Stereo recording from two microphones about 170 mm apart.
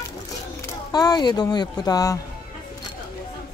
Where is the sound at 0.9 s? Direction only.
25° left (ahead or behind).